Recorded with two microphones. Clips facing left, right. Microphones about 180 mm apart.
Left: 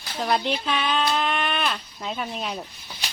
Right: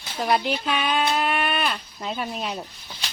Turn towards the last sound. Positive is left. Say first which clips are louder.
# even
turn(degrees=0)  # may be behind; listen again after turning